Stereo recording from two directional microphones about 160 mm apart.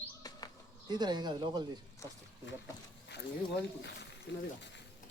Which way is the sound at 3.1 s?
90° left.